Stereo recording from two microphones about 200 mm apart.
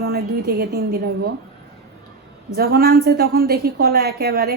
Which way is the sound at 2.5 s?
50° right (ahead or behind).